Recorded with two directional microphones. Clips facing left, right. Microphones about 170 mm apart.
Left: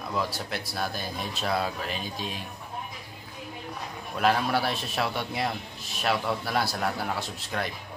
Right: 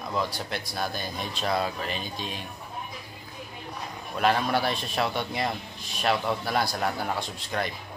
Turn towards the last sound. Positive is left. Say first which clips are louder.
# right 1 dB
turn(degrees=0)  # may be behind; listen again after turning